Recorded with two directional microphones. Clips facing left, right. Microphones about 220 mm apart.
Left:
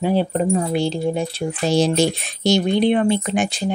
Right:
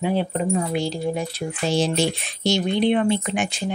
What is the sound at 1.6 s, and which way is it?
Speech, 40° left (ahead or behind).